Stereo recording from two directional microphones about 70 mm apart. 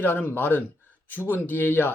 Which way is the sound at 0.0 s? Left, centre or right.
Left.